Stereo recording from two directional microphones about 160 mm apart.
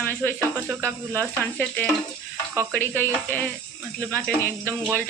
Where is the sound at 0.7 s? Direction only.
15° right (ahead or behind).